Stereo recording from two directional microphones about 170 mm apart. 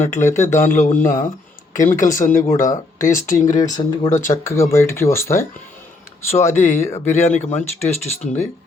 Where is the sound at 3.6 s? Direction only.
25° left (ahead or behind).